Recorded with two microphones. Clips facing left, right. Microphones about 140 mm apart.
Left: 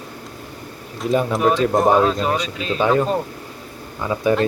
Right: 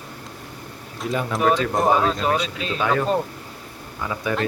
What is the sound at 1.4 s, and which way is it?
Speech, centre (ahead or behind).